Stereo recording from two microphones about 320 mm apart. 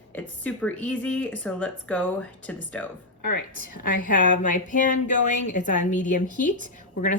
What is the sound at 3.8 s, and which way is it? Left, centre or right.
Speech, left.